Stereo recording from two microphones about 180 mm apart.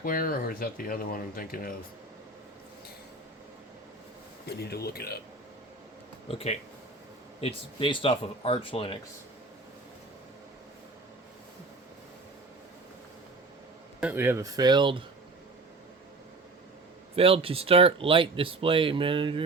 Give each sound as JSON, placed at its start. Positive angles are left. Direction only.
{"t": 0.0, "sound": "speech", "side_deg": 50}
{"t": 4.4, "sound": "speech", "side_deg": 60}
{"t": 6.2, "sound": "speech", "side_deg": 35}
{"t": 14.0, "sound": "speech", "side_deg": -10}
{"t": 17.2, "sound": "speech", "side_deg": -30}